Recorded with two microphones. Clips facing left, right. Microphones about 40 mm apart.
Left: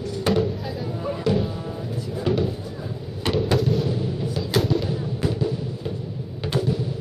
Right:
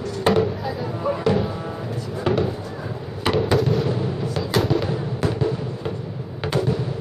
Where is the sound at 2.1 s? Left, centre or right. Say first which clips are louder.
Right 2 dB; centre.